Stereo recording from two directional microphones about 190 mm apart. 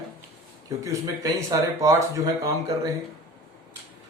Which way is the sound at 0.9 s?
15° right (ahead or behind).